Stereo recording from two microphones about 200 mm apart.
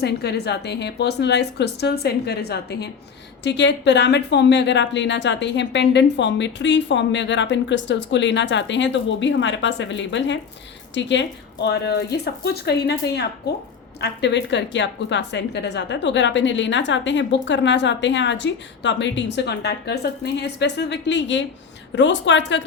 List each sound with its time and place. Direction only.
0.0 s a woman's voice: 55° left (ahead or behind)